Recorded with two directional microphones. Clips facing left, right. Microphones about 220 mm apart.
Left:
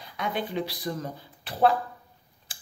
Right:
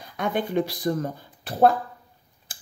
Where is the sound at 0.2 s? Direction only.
50° right (ahead or behind).